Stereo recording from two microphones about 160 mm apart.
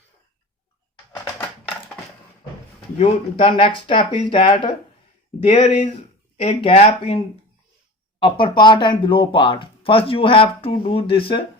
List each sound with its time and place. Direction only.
3.0 s speech: 30° left (ahead or behind)
5.5 s speech: 40° left (ahead or behind)
8.2 s speech: 30° left (ahead or behind)